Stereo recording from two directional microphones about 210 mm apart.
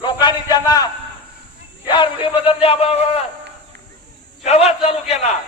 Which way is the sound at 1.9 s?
25° left (ahead or behind).